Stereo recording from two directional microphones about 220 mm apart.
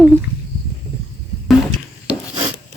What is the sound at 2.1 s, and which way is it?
Filing, 5° right (ahead or behind).